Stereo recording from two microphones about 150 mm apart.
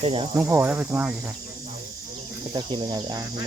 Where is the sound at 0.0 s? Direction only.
40° right (ahead or behind).